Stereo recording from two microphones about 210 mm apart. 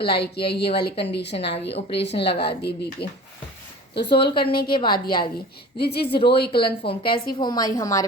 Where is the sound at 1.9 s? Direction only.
55° left (ahead or behind).